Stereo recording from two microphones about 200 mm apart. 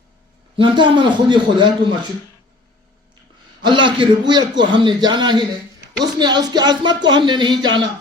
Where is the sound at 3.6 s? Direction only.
25° right (ahead or behind).